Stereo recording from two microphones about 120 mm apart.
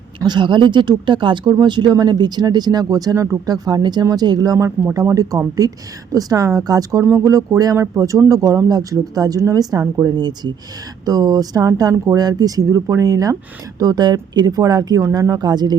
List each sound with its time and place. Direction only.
0.2 s speech: 40° right (ahead or behind)
4.5 s a man's voice: 25° right (ahead or behind)
7.0 s speech: 15° right (ahead or behind)
7.3 s a man's voice: 25° right (ahead or behind)